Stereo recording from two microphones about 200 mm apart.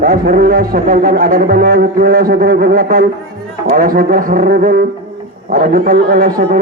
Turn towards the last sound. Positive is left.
turn(degrees=-45)  # may be behind; listen again after turning